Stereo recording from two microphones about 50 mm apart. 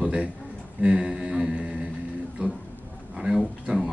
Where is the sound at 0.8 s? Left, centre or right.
Centre.